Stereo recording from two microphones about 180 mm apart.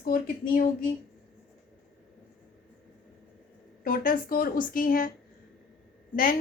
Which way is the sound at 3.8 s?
50° left (ahead or behind).